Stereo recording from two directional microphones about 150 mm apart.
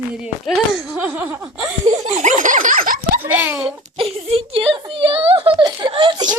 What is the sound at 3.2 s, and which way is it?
Speech, 10° right (ahead or behind).